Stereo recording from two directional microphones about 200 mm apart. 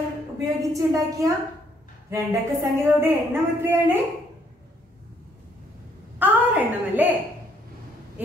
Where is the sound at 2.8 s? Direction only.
10° right (ahead or behind).